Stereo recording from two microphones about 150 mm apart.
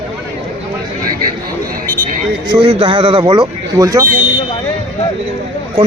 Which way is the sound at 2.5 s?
35° right (ahead or behind).